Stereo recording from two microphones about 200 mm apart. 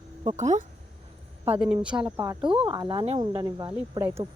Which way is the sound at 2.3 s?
25° right (ahead or behind).